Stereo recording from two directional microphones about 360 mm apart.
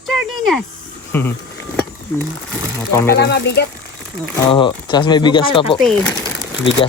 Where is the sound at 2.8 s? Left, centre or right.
Centre.